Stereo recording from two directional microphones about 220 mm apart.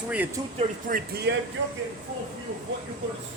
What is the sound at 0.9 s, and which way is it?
Speech, 45° right (ahead or behind).